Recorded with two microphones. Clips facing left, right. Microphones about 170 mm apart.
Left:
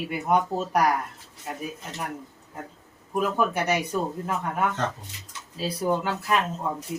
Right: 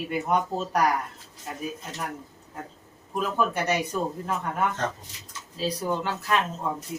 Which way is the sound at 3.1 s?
10° left (ahead or behind).